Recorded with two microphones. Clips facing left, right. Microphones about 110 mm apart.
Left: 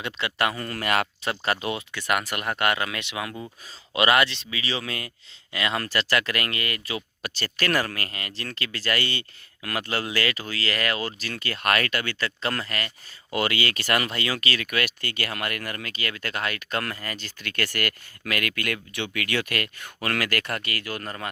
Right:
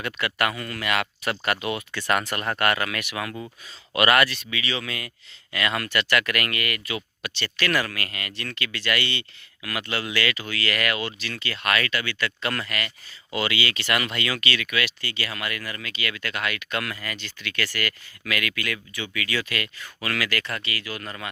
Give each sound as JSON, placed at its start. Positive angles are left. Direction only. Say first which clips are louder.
{"t": 0.0, "sound": "speech", "louder": "even", "side_deg": 25}
{"t": 1.2, "sound": "speech", "louder": "even", "side_deg": 25}
{"t": 1.9, "sound": "speech", "louder": "right 3 dB", "side_deg": 15}
{"t": 12.2, "sound": "speech", "louder": "even", "side_deg": 30}
{"t": 13.3, "sound": "speech", "louder": "left 1 dB", "side_deg": 45}
{"t": 21.0, "sound": "speech", "louder": "left 1 dB", "side_deg": 40}